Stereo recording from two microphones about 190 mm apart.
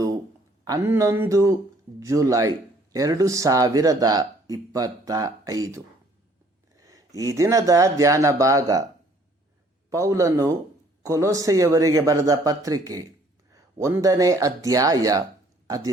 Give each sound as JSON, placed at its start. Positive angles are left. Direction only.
{"t": 0.6, "sound": "speech", "side_deg": -15}
{"t": 9.9, "sound": "speech", "side_deg": -15}